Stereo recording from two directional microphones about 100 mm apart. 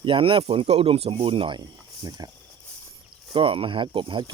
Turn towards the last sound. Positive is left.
turn(degrees=-55)  # may be behind; listen again after turning